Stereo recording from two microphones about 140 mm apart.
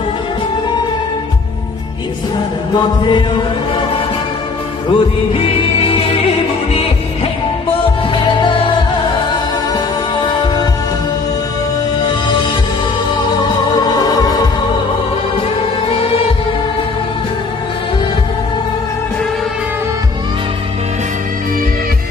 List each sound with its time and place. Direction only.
2.7 s music: 35° left (ahead or behind)
4.8 s music: 40° left (ahead or behind)
10.4 s music: 30° left (ahead or behind)
12.0 s music: 30° left (ahead or behind)
13.7 s music: 25° left (ahead or behind)